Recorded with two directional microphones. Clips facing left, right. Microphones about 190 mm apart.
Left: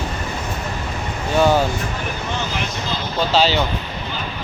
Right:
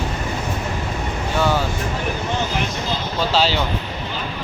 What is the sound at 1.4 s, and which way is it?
Speech, 15° left (ahead or behind).